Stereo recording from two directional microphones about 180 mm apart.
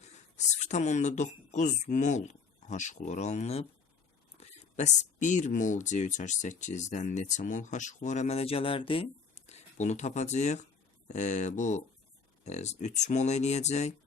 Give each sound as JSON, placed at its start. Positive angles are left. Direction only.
{"t": 0.0, "sound": "speech", "side_deg": 40}